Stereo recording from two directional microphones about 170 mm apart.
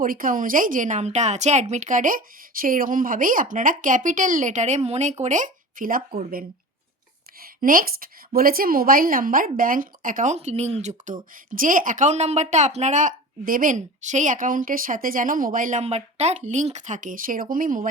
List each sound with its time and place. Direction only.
0.0 s a woman's voice: 55° right (ahead or behind)
7.6 s a woman's voice: 55° right (ahead or behind)